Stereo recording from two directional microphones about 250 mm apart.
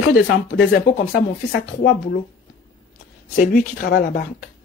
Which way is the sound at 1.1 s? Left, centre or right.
Left.